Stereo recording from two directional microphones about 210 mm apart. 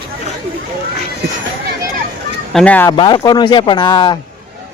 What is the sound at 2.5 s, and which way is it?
Speech, 5° left (ahead or behind).